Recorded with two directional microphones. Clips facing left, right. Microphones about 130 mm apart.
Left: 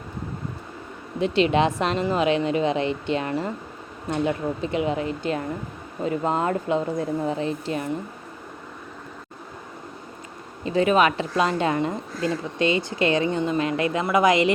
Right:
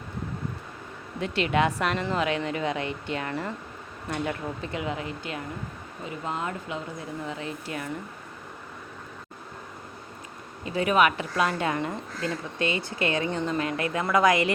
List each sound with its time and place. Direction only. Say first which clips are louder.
1.2 s speech: left 5 dB; 25° left (ahead or behind)
10.7 s speech: left 3 dB; 30° left (ahead or behind)